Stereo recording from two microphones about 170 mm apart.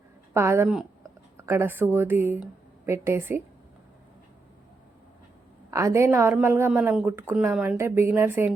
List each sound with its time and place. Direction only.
0.3 s speech: 15° right (ahead or behind)
5.7 s speech: 15° right (ahead or behind)